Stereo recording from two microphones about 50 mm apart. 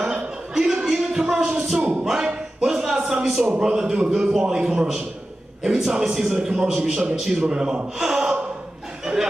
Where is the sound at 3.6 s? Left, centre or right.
Centre.